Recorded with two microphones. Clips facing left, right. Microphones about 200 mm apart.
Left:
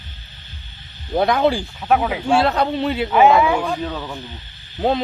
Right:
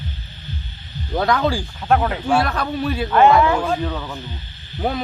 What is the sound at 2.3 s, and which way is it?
Speech, 25° left (ahead or behind).